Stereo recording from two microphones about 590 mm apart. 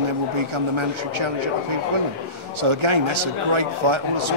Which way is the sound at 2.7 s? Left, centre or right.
Right.